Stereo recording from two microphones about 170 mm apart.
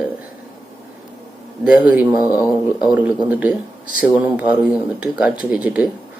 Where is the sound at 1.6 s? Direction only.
5° right (ahead or behind).